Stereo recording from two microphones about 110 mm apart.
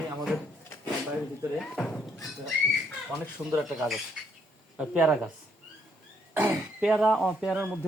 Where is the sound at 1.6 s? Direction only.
5° left (ahead or behind).